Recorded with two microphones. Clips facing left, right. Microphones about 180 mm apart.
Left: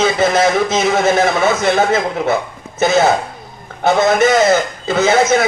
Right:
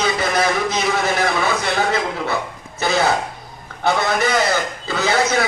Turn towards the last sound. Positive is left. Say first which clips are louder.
# left 6 dB
turn(degrees=20)  # may be behind; listen again after turning